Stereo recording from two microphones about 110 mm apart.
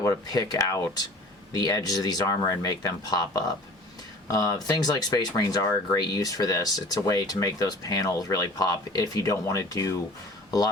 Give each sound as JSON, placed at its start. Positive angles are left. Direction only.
{"t": 0.0, "sound": "speech", "side_deg": 35}